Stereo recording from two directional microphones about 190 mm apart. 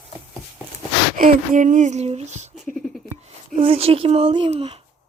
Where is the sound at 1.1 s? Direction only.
45° right (ahead or behind).